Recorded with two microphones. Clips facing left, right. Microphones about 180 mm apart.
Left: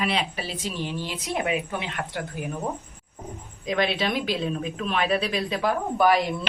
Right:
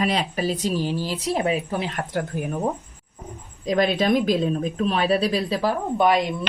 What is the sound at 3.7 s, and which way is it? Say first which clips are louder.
A woman's voice: right 5 dB; 40° right (ahead or behind).